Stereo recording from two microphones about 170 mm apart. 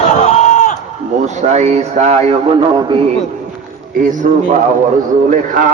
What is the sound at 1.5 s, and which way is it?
Speech, 40° right (ahead or behind).